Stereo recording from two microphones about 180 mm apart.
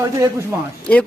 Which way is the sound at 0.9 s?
5° left (ahead or behind).